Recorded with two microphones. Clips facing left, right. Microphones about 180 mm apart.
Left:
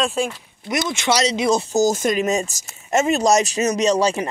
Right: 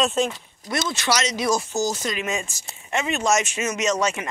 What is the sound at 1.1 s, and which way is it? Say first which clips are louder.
Speech: left 5 dB; 30° left (ahead or behind).